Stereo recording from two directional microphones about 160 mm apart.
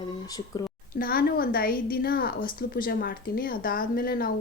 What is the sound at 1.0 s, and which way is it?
A woman's voice, 65° left (ahead or behind).